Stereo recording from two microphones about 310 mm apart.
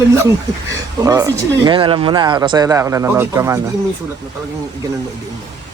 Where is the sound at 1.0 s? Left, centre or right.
Centre.